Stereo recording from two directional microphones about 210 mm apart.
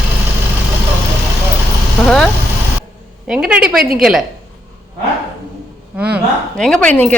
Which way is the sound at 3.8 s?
45° right (ahead or behind).